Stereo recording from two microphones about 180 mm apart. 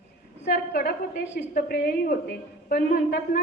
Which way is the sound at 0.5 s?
55° left (ahead or behind).